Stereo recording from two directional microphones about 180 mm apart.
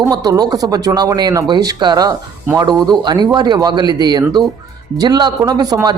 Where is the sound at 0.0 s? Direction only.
20° right (ahead or behind).